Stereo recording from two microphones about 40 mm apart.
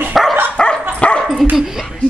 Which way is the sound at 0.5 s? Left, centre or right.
Left.